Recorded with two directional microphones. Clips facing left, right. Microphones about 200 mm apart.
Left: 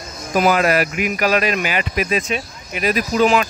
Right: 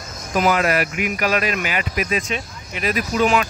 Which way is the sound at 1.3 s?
25° left (ahead or behind).